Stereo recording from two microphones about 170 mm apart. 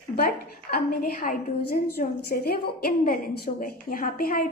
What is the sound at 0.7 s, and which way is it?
A woman's voice, 60° left (ahead or behind).